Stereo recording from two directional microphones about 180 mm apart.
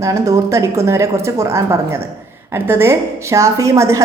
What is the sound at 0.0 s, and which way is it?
A woman's voice, 20° right (ahead or behind).